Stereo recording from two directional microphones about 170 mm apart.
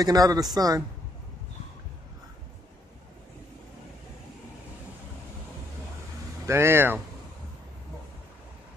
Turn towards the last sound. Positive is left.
turn(degrees=-15)  # may be behind; listen again after turning